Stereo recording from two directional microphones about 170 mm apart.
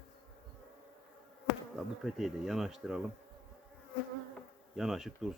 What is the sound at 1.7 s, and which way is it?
Speech, centre (ahead or behind).